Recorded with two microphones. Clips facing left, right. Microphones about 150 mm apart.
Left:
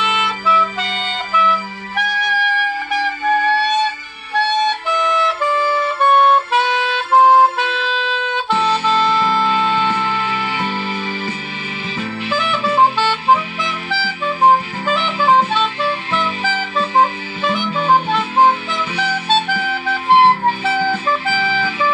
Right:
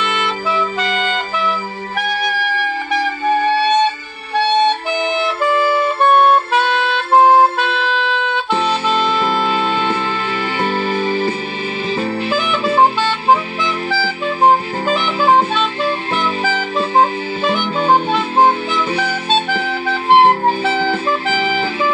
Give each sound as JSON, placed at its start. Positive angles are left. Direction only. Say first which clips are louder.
{"t": 9.5, "sound": "music", "louder": "even", "side_deg": -40}
{"t": 16.4, "sound": "music", "louder": "right 2 dB", "side_deg": -30}
{"t": 18.7, "sound": "music", "louder": "right 4 dB", "side_deg": -40}
{"t": 20.2, "sound": "music", "louder": "right 1 dB", "side_deg": -45}